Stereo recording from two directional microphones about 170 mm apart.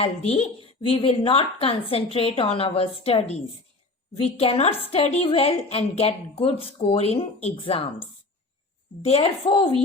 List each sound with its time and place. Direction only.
0.0 s a woman's voice: 35° left (ahead or behind)
9.0 s a woman's voice: 35° left (ahead or behind)